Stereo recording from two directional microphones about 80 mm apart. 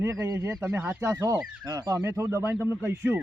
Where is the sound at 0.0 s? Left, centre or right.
Right.